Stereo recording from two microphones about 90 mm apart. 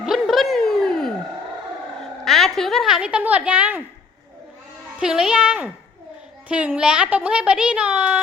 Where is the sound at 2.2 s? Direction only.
5° left (ahead or behind); by 3.8 s 15° right (ahead or behind).